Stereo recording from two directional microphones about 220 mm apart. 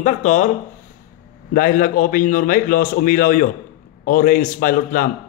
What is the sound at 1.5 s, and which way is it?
A man's voice, 40° left (ahead or behind).